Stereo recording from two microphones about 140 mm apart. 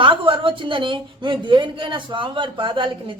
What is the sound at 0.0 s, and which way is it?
A woman's voice, 40° right (ahead or behind).